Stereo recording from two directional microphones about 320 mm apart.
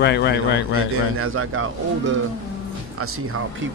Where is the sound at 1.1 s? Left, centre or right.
Right.